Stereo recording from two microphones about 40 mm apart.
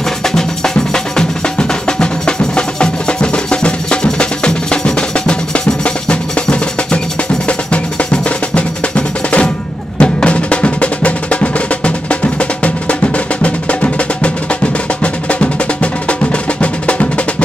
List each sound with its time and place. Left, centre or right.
0.9 s music: left